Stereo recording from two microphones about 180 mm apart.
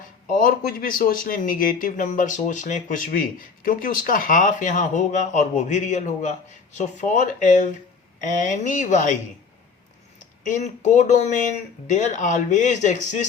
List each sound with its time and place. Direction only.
0.3 s speech: 50° left (ahead or behind)
10.2 s speech: 45° left (ahead or behind)